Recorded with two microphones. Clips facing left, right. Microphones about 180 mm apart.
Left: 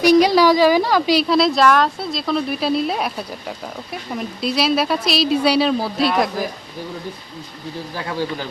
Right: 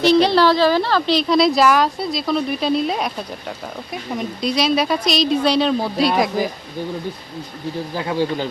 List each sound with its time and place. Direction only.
0.0 s speech: 10° left (ahead or behind)
7.9 s speech: 20° right (ahead or behind)